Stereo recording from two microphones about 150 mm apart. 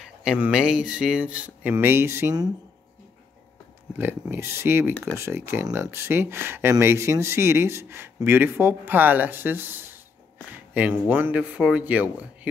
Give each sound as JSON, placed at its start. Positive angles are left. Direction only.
{"t": 0.0, "sound": "speech", "side_deg": -5}
{"t": 3.9, "sound": "speech", "side_deg": -15}